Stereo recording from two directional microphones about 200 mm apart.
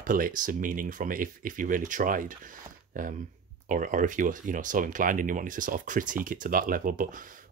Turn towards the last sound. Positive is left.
turn(degrees=-40)  # may be behind; listen again after turning